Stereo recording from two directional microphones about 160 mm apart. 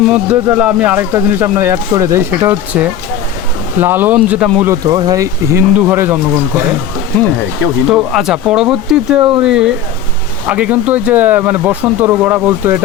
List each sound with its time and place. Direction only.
0.0 s speech: 5° right (ahead or behind)
4.6 s speech: 20° right (ahead or behind)
7.9 s speech: 5° right (ahead or behind)